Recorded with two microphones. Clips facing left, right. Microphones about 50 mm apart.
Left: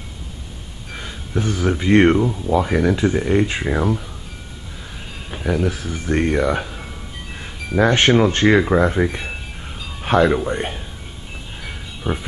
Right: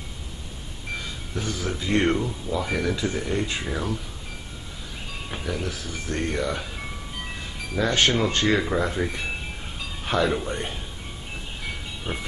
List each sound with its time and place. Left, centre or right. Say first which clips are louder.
0.9 s speech: left 7 dB; left
5.4 s speech: left 11 dB; left
7.7 s speech: left 7 dB; left
10.3 s a man's voice: left 7 dB; left